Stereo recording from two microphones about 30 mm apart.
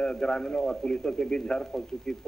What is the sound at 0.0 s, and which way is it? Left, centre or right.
A man's voice, left.